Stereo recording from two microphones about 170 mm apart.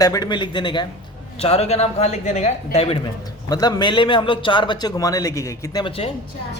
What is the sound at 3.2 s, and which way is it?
A man's voice, 25° left (ahead or behind).